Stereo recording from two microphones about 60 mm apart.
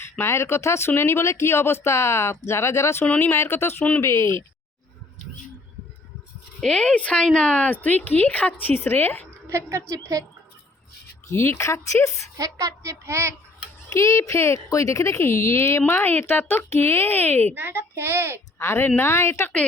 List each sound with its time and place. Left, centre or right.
0.0 s speech: left
6.6 s a woman's voice: centre; by 9.2 s left
9.5 s a woman's voice: right
9.9 s speech: right
11.3 s speech: left
12.4 s a child's voice: right
13.9 s speech: left
15.9 s speech: left
17.5 s a woman's voice: right
18.6 s speech: left